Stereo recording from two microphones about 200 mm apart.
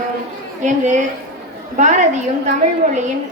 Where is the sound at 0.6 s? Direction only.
40° right (ahead or behind).